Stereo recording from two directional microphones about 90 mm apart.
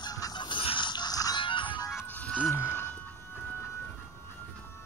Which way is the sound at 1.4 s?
65° left (ahead or behind).